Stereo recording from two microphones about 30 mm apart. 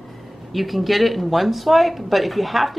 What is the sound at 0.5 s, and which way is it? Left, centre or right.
Speech, centre.